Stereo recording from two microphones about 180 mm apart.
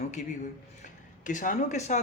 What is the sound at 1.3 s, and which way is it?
Speech, 45° left (ahead or behind).